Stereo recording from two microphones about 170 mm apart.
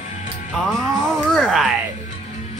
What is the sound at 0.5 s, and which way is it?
Music, centre (ahead or behind).